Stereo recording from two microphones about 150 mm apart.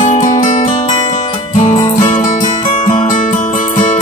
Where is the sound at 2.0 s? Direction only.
55° left (ahead or behind).